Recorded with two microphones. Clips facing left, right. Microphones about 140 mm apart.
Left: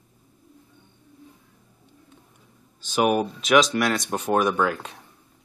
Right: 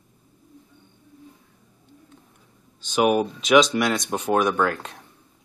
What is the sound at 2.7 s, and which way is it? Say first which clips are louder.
Speech: right 1 dB; 5° left (ahead or behind).